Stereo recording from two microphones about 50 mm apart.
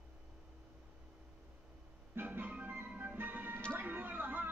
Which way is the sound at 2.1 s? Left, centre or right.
Right.